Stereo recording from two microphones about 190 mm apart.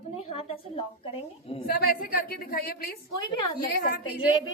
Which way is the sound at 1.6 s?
50° left (ahead or behind).